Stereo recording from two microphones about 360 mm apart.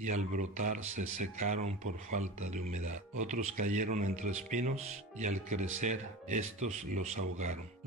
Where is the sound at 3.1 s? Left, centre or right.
Centre.